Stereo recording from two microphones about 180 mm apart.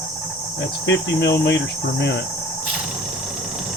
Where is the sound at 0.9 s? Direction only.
80° left.